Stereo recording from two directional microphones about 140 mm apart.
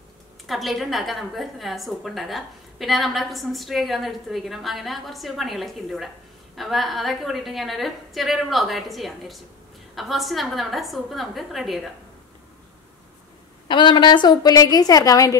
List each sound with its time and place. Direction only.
0.5 s a woman's voice: centre (ahead or behind)
13.7 s a woman's voice: 35° left (ahead or behind)